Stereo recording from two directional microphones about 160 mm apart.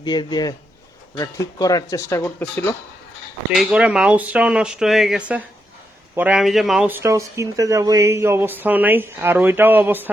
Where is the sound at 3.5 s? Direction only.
5° right (ahead or behind).